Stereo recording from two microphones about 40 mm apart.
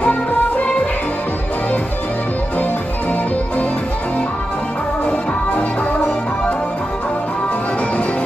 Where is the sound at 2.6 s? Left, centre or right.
Left.